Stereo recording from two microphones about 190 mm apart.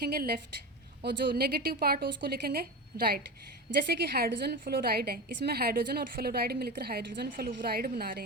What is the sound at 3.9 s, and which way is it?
A woman's voice, 55° right (ahead or behind).